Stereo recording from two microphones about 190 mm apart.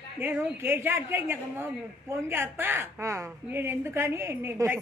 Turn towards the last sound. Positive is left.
turn(degrees=-10)  # may be behind; listen again after turning